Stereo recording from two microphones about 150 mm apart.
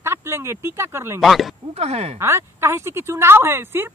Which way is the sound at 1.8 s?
45° right (ahead or behind).